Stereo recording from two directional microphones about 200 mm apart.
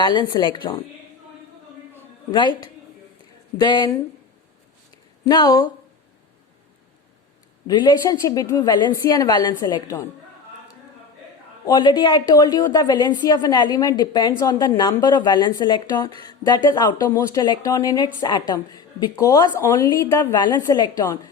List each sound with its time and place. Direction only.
0.0 s a woman's voice: 20° left (ahead or behind)
2.3 s a woman's voice: 25° left (ahead or behind)
3.6 s a woman's voice: 20° left (ahead or behind)
5.2 s a woman's voice: 20° left (ahead or behind)
7.7 s a woman's voice: 20° left (ahead or behind)
11.6 s a woman's voice: 20° left (ahead or behind)